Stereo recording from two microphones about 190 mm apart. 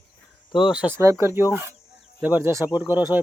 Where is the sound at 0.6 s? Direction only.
5° right (ahead or behind).